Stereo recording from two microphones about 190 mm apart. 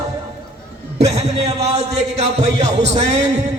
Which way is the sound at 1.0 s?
35° right (ahead or behind).